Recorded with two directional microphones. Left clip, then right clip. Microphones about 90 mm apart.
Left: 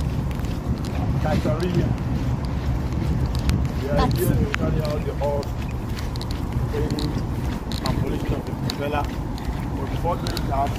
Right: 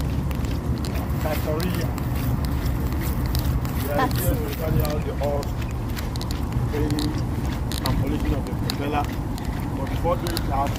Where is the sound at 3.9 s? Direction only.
15° left (ahead or behind).